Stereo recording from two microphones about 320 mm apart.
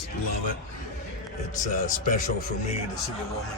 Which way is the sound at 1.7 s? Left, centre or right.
Left.